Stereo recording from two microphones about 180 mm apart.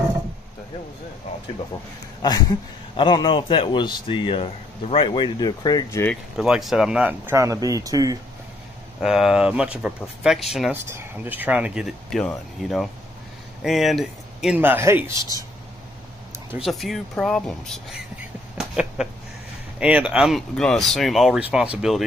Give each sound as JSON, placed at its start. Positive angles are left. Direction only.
{"t": 3.0, "sound": "a man's voice", "side_deg": 25}
{"t": 6.3, "sound": "speech", "side_deg": -5}
{"t": 9.0, "sound": "speech", "side_deg": 0}
{"t": 10.7, "sound": "speech", "side_deg": -10}
{"t": 16.5, "sound": "speech", "side_deg": 0}